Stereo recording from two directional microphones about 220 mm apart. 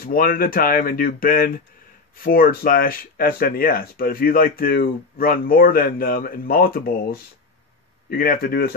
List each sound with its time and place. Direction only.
0.0 s speech: 40° left (ahead or behind)